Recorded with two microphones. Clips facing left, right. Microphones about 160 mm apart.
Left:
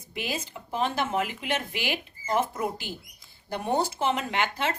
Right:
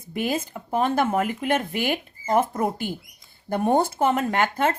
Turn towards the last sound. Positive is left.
turn(degrees=-50)  # may be behind; listen again after turning